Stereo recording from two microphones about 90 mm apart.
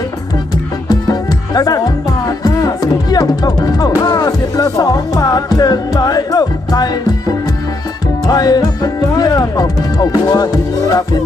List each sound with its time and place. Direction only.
0.9 s music: 45° left (ahead or behind)